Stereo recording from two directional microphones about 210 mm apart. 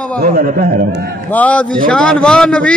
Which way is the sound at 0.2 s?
45° right (ahead or behind).